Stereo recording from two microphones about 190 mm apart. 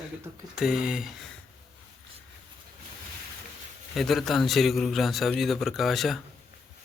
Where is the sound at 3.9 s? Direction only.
Centre (ahead or behind).